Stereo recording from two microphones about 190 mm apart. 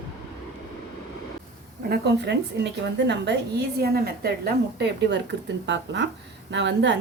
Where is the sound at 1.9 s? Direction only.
65° right (ahead or behind).